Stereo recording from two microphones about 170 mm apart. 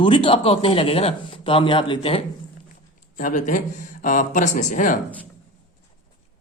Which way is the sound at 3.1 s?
50° left (ahead or behind).